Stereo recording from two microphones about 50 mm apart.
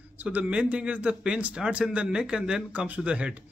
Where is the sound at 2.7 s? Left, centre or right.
Right.